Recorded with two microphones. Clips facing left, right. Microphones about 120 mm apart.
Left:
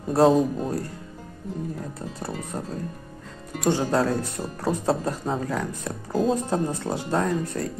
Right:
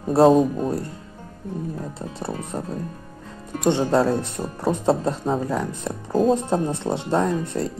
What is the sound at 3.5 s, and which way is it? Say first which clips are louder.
Speech: right 3 dB; 25° right (ahead or behind).